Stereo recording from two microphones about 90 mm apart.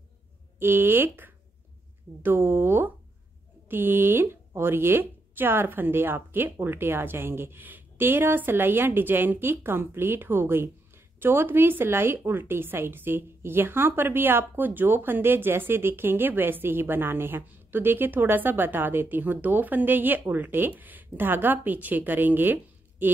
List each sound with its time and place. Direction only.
0.6 s a woman's voice: 25° right (ahead or behind)